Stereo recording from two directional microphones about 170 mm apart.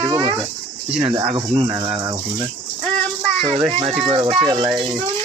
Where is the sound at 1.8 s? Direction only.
10° right (ahead or behind).